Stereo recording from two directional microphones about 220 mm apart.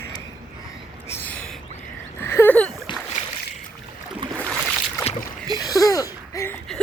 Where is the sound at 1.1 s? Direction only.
5° left (ahead or behind).